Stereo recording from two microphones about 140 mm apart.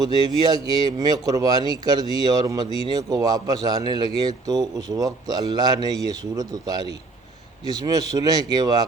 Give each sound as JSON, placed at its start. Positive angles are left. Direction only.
{"t": 0.0, "sound": "a man's voice", "side_deg": -30}